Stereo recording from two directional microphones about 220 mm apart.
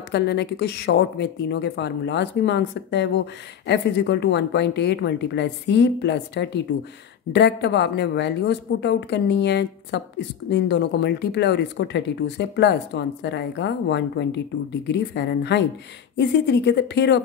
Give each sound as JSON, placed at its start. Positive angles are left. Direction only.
{"t": 0.1, "sound": "a woman's voice", "side_deg": 50}